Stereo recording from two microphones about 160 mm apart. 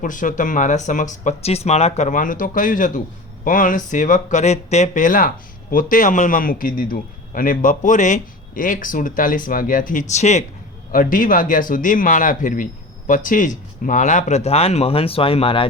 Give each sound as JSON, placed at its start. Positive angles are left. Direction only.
{"t": 0.0, "sound": "a man's voice", "side_deg": 55}
{"t": 10.9, "sound": "a man's voice", "side_deg": 60}